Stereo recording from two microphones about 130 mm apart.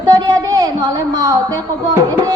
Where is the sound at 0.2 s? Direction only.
30° right (ahead or behind).